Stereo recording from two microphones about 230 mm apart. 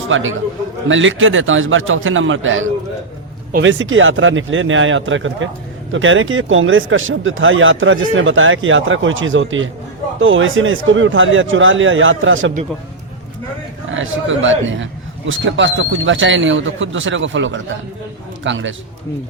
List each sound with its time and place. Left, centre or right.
0.1 s speech: right
13.9 s a man's voice: right